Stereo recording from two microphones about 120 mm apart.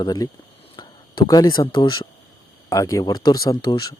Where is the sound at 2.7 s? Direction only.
25° left (ahead or behind).